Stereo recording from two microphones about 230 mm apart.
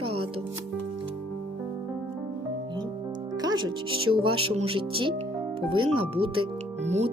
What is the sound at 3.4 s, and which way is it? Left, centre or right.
Speech, centre.